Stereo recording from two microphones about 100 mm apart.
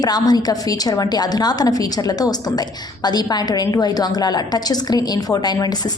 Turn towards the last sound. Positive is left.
turn(degrees=40)  # may be behind; listen again after turning